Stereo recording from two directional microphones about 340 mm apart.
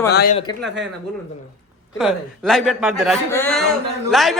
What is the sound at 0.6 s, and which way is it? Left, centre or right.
Speech, right.